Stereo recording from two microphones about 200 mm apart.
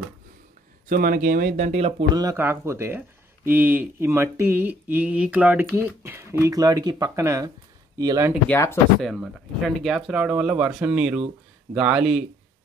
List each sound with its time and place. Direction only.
0.8 s speech: 45° right (ahead or behind)
2.1 s speech: 15° right (ahead or behind)
8.5 s speech: 10° left (ahead or behind)
9.0 s speech: centre (ahead or behind)